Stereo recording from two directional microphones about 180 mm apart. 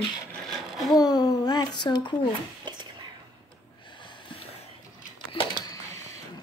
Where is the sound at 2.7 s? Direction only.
25° right (ahead or behind).